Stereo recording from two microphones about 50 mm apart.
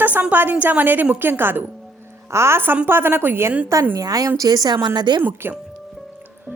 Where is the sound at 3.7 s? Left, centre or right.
Right.